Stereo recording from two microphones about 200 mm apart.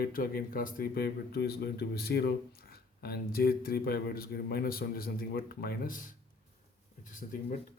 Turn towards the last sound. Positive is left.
turn(degrees=40)  # may be behind; listen again after turning